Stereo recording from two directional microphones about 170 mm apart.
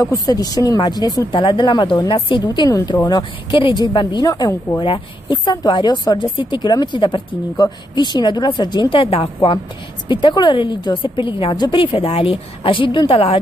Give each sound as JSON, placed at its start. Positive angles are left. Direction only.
{"t": 0.0, "sound": "a woman's voice", "side_deg": 20}